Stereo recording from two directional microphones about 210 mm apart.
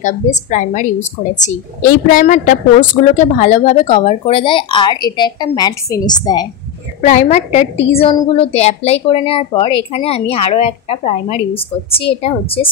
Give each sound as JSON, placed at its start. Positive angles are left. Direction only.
{"t": 0.0, "sound": "a woman's voice", "side_deg": 35}
{"t": 7.0, "sound": "a woman's voice", "side_deg": 35}